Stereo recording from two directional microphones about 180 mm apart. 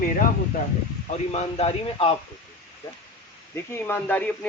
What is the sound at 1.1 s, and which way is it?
A man's voice, 35° left (ahead or behind).